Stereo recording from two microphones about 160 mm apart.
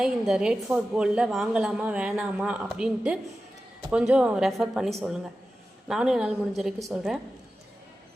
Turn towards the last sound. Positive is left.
turn(degrees=-5)  # may be behind; listen again after turning